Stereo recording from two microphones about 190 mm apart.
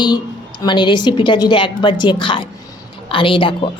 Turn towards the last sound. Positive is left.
turn(degrees=25)  # may be behind; listen again after turning